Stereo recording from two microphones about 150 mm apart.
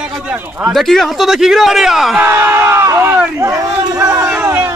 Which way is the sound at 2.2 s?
15° right (ahead or behind).